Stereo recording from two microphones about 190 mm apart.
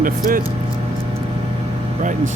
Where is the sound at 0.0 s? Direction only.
45° right (ahead or behind).